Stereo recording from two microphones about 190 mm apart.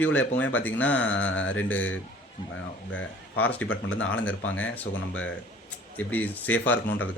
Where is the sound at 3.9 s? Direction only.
90° left.